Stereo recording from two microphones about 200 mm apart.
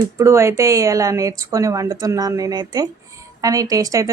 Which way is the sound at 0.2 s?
15° right (ahead or behind).